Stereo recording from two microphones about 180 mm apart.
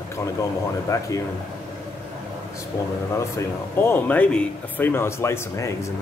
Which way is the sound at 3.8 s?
10° left (ahead or behind).